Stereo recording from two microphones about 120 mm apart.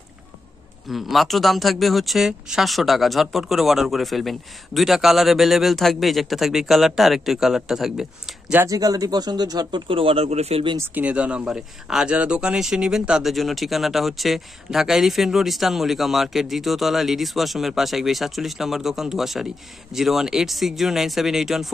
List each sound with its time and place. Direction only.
0.8 s speech: centre (ahead or behind)
8.6 s speech: 30° right (ahead or behind); by 10.6 s 60° right (ahead or behind)
11.0 s speech: 10° right (ahead or behind)